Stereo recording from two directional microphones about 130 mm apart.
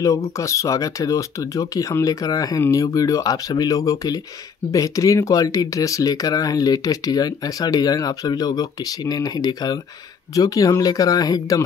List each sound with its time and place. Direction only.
0.0 s speech: 25° left (ahead or behind)